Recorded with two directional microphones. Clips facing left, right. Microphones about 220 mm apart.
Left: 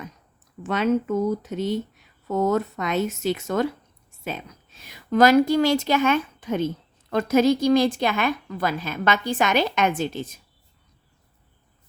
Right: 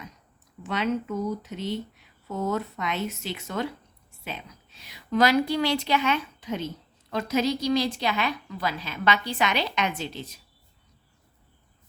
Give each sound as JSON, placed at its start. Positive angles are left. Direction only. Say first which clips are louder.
{"t": 0.6, "sound": "a woman's voice", "louder": "left 5 dB", "side_deg": 50}